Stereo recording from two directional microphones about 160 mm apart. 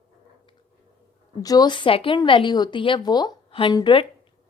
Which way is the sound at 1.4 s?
25° left (ahead or behind).